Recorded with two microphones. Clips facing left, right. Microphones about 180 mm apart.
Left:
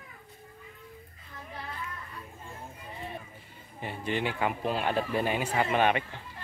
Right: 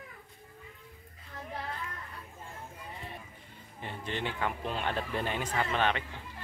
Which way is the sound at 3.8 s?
10° left (ahead or behind).